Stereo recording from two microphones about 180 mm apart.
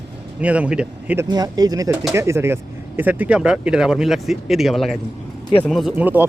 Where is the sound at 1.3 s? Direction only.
20° right (ahead or behind).